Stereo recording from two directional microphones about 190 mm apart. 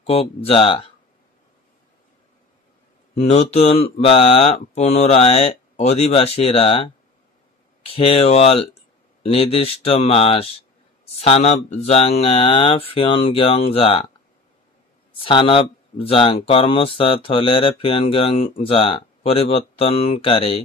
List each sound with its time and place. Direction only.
0.0 s speech: 30° left (ahead or behind)
3.2 s speech: 30° left (ahead or behind)
15.1 s speech: 25° left (ahead or behind)